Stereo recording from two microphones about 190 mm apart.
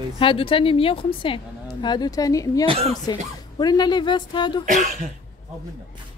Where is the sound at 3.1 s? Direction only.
20° left (ahead or behind).